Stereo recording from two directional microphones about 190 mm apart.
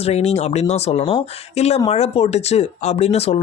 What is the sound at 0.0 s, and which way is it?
Speech, 35° left (ahead or behind).